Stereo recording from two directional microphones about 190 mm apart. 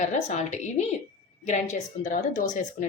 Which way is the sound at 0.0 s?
40° left (ahead or behind).